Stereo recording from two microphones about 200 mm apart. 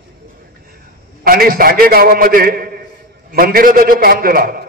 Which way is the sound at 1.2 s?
45° right (ahead or behind).